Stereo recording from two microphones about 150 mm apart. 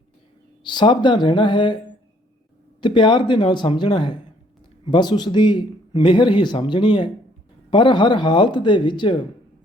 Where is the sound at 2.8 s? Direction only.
30° left (ahead or behind).